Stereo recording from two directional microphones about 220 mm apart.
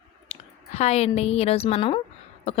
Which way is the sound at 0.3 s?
30° left (ahead or behind).